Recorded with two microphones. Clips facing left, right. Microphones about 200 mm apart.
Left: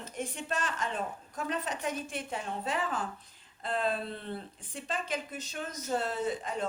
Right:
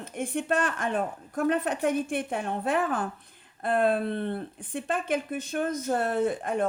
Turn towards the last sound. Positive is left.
turn(degrees=-55)  # may be behind; listen again after turning